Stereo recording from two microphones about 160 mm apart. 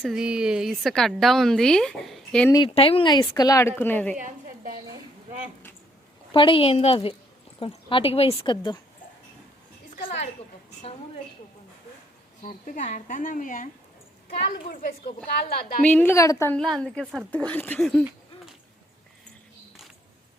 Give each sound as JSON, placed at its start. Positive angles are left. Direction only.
{"t": 0.0, "sound": "a woman's voice", "side_deg": -5}
{"t": 2.7, "sound": "a woman's voice", "side_deg": 35}
{"t": 4.1, "sound": "a sound", "side_deg": -60}
{"t": 6.3, "sound": "speech", "side_deg": 30}
{"t": 9.9, "sound": "a sound", "side_deg": 50}
{"t": 12.4, "sound": "speech", "side_deg": 55}
{"t": 14.7, "sound": "speech", "side_deg": 65}
{"t": 15.8, "sound": "a woman's voice", "side_deg": 10}
{"t": 16.6, "sound": "a woman's voice", "side_deg": 0}